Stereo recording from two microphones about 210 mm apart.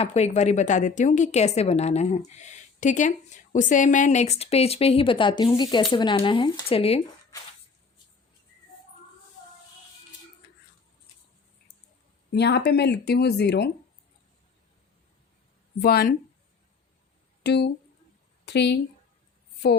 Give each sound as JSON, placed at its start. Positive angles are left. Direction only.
{"t": 0.0, "sound": "a woman's voice", "side_deg": 30}
{"t": 12.3, "sound": "speech", "side_deg": 55}
{"t": 15.8, "sound": "speech", "side_deg": 45}
{"t": 17.4, "sound": "speech", "side_deg": 55}